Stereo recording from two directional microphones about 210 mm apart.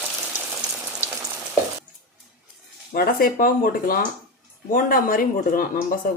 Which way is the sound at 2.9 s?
45° left (ahead or behind).